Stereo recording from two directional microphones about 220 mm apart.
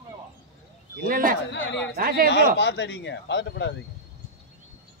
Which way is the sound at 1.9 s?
40° right (ahead or behind).